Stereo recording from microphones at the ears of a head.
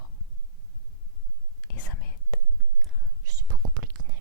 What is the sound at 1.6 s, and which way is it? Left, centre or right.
Whispering, left.